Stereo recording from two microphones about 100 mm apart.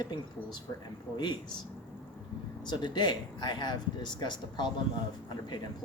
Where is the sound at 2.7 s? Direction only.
45° left (ahead or behind).